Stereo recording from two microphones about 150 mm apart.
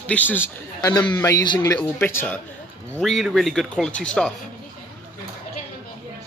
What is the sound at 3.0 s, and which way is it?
A man's voice, centre (ahead or behind).